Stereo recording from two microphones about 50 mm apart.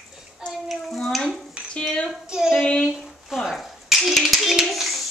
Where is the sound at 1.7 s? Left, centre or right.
Left.